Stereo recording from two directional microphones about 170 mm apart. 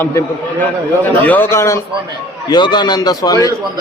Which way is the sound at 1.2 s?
10° left (ahead or behind).